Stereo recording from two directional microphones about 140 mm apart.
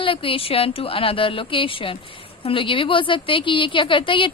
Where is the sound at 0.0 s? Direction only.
40° left (ahead or behind).